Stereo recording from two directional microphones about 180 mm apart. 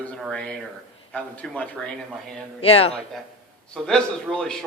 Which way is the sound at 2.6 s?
30° left (ahead or behind).